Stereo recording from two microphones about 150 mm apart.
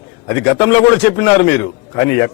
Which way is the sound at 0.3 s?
15° left (ahead or behind).